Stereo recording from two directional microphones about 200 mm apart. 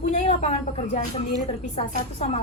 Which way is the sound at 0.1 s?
35° left (ahead or behind).